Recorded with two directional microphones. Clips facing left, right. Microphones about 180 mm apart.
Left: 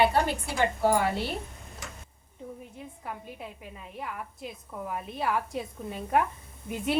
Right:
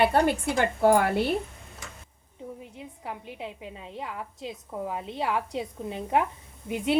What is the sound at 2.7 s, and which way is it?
A woman's voice, 20° right (ahead or behind).